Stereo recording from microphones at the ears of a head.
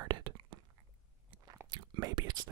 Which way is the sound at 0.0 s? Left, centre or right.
Right.